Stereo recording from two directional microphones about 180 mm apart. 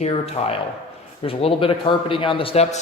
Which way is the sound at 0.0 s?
35° left (ahead or behind).